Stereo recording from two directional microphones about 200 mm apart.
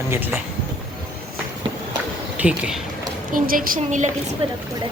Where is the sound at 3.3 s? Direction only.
45° right (ahead or behind).